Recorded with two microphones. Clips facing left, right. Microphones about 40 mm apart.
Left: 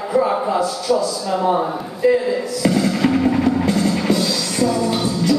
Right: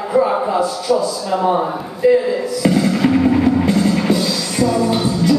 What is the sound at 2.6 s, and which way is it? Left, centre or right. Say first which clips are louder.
Music: right 2 dB; centre.